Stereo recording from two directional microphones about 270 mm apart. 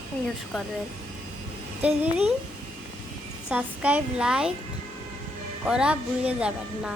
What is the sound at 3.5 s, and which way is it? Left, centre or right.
Speech, centre.